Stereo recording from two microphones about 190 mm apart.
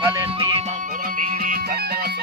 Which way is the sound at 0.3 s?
30° right (ahead or behind).